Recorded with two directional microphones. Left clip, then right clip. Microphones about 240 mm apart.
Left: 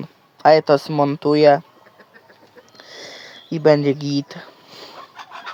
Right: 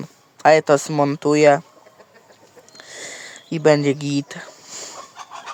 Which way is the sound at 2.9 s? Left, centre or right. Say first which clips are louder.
Right 2 dB; centre.